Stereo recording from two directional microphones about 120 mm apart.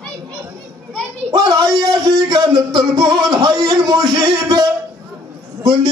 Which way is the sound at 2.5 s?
35° right (ahead or behind).